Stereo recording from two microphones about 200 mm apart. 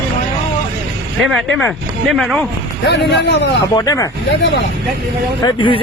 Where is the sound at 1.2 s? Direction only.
Centre (ahead or behind).